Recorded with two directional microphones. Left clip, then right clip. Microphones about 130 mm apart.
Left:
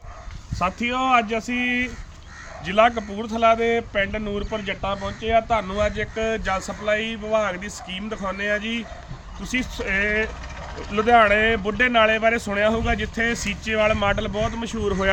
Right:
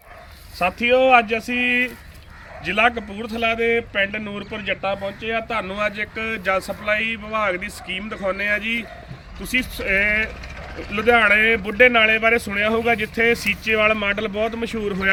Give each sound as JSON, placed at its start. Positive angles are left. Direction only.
{"t": 0.6, "sound": "speech", "side_deg": 35}